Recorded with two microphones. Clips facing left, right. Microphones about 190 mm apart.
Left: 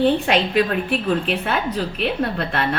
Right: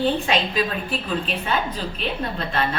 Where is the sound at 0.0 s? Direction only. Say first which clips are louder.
Left 4 dB; 65° left (ahead or behind).